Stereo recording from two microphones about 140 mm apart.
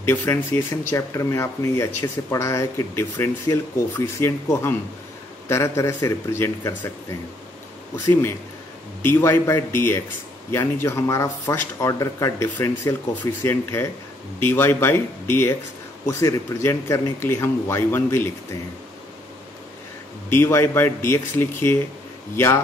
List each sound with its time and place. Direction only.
0.1 s speech: 20° left (ahead or behind)
7.9 s speech: 15° left (ahead or behind)
20.2 s speech: 20° left (ahead or behind)